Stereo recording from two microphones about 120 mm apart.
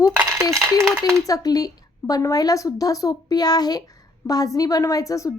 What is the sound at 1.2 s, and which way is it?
A woman's voice, 30° left (ahead or behind).